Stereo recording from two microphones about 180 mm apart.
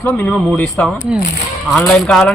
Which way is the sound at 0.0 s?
10° left (ahead or behind).